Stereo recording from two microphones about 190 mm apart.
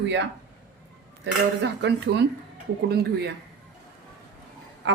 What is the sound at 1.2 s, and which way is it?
Speech, 65° right (ahead or behind).